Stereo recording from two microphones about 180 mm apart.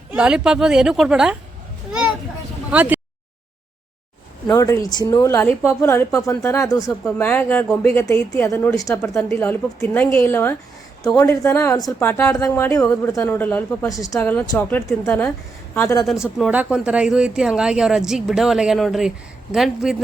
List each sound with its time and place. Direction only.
0.1 s speech: 5° right (ahead or behind)
2.7 s speech: 10° right (ahead or behind)
4.5 s a woman's voice: 20° left (ahead or behind)
16.4 s speech: 5° right (ahead or behind)